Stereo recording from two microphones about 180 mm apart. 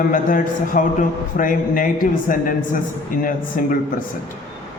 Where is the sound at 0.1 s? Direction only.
50° left (ahead or behind).